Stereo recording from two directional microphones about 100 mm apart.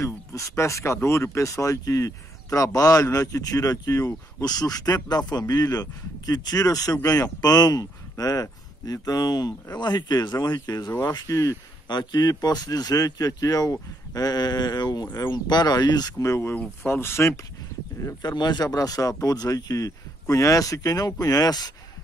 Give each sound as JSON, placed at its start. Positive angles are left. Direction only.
{"t": 0.0, "sound": "speech", "side_deg": 30}
{"t": 18.0, "sound": "speech", "side_deg": 45}